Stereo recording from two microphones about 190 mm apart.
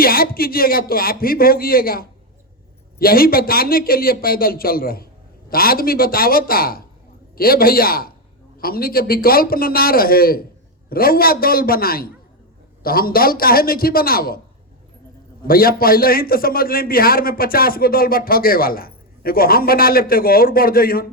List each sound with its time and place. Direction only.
0.0 s a man's voice: 50° left (ahead or behind)
15.4 s a man's voice: 50° left (ahead or behind)